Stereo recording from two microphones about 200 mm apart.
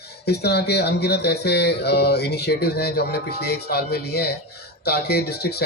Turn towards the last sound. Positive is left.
turn(degrees=55)  # may be behind; listen again after turning